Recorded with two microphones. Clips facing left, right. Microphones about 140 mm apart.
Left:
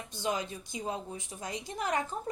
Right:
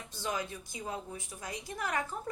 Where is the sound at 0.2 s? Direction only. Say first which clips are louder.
Left 3 dB; 20° left (ahead or behind).